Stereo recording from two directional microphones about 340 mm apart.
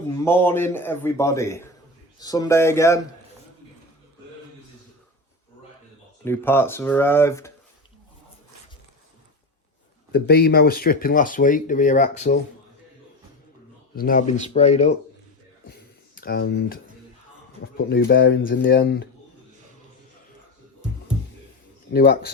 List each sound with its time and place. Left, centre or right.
0.3 s a man's voice: centre
6.2 s a man's voice: centre
10.1 s speech: left
13.9 s speech: left
15.6 s a sound: left
17.7 s speech: left
21.9 s speech: left